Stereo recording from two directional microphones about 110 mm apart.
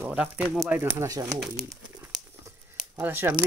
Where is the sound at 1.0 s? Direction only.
30° right (ahead or behind).